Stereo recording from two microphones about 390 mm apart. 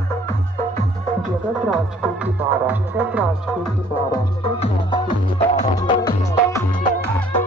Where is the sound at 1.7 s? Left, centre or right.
Centre.